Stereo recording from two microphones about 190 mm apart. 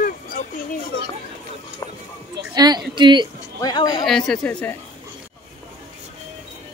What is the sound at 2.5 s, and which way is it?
Speech, 20° right (ahead or behind).